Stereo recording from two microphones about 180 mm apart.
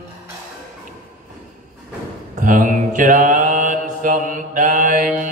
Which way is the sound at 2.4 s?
45° right (ahead or behind).